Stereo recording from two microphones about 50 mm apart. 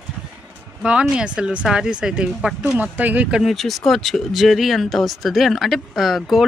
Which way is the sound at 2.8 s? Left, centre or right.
Right.